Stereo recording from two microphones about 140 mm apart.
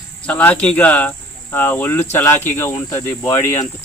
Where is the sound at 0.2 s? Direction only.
10° left (ahead or behind).